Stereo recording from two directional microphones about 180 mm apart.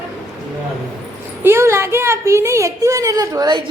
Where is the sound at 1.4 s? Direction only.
15° right (ahead or behind).